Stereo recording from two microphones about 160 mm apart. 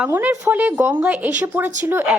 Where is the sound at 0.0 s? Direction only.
10° right (ahead or behind).